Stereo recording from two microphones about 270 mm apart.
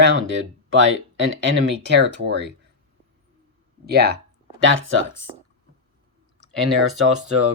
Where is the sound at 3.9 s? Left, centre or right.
Right.